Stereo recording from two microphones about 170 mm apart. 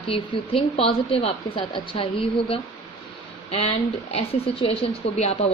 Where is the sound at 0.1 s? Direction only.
35° left (ahead or behind).